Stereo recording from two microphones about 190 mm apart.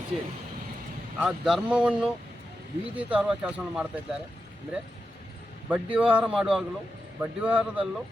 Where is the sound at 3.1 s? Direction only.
5° right (ahead or behind).